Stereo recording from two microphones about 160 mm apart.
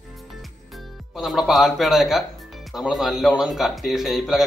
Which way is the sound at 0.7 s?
Centre (ahead or behind).